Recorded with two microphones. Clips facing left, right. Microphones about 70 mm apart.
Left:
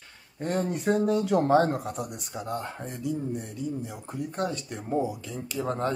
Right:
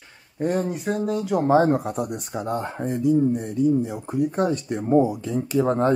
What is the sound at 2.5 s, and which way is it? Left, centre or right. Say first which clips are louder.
Speech: right 8 dB; right.